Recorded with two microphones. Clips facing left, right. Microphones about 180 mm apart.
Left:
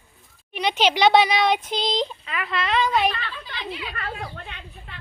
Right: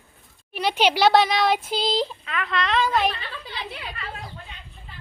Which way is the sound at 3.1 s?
70° left (ahead or behind).